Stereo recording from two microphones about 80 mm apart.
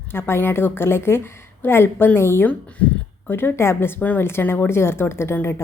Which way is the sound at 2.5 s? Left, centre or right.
Centre.